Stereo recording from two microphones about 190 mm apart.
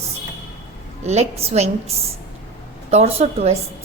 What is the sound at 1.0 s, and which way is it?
A woman's voice, 35° right (ahead or behind).